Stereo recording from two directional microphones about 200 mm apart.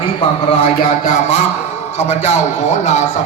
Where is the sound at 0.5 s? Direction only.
30° left (ahead or behind).